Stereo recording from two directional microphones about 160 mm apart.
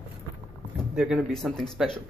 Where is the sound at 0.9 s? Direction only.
Centre (ahead or behind).